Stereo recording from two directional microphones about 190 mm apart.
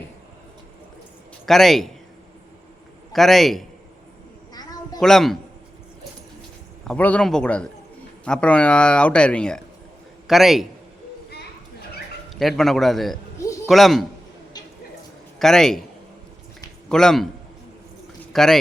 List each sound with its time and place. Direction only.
1.5 s speech: centre (ahead or behind)
3.1 s speech: centre (ahead or behind)
4.5 s a sound: 20° left (ahead or behind)
4.9 s speech: centre (ahead or behind)
6.8 s speech: 5° left (ahead or behind)
12.3 s speech: centre (ahead or behind)
13.4 s a sound: 15° left (ahead or behind)
13.7 s speech: centre (ahead or behind)
15.4 s speech: centre (ahead or behind)
16.9 s speech: 5° left (ahead or behind)
18.3 s speech: centre (ahead or behind)